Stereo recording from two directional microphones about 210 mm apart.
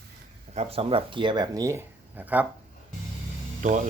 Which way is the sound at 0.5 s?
25° right (ahead or behind).